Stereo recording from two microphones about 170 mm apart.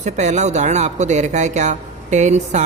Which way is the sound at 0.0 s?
45° right (ahead or behind).